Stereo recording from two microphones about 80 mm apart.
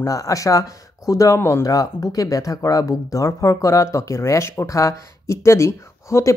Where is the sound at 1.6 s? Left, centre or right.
Left.